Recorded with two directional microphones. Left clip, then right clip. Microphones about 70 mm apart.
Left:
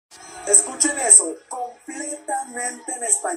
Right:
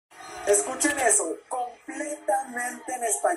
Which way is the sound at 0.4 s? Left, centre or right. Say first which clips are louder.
Left 2 dB; centre.